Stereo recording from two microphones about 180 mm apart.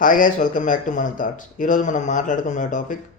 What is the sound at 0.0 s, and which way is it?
Speech, 45° left (ahead or behind).